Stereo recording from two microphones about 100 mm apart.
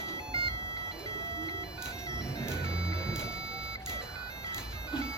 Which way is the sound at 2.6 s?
10° right (ahead or behind).